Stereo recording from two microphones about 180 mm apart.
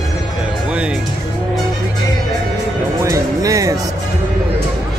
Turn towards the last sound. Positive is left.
turn(degrees=-20)  # may be behind; listen again after turning